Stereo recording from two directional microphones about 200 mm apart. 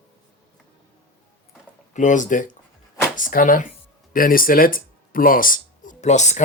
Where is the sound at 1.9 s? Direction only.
40° left (ahead or behind).